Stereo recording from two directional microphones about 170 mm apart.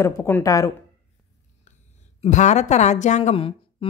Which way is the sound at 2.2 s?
45° left (ahead or behind).